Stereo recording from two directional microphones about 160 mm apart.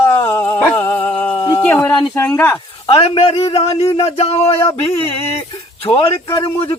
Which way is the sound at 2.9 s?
35° left (ahead or behind).